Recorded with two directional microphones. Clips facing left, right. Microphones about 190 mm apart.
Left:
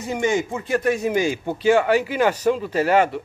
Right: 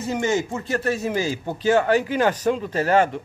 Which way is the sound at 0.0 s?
15° left (ahead or behind).